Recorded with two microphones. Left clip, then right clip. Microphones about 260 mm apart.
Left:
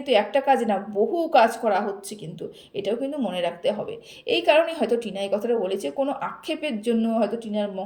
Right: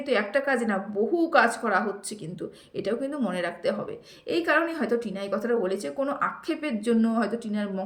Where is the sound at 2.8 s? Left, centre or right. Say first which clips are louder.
Left 3 dB; centre.